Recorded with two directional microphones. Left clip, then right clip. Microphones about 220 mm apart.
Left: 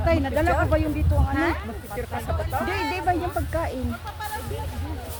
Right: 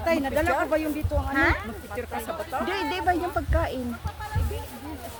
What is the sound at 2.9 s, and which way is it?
Speech, 10° right (ahead or behind).